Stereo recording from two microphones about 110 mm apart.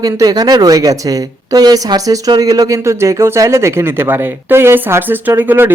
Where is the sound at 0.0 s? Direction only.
35° right (ahead or behind).